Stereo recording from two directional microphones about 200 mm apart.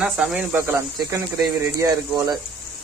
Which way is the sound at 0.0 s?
5° right (ahead or behind).